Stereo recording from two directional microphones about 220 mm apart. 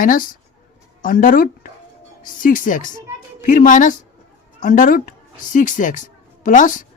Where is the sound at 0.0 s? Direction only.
40° left (ahead or behind).